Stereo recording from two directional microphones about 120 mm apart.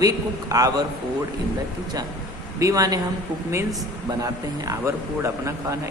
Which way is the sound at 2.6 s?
30° right (ahead or behind).